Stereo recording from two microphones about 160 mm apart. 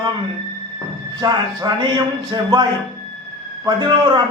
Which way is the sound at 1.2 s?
25° right (ahead or behind).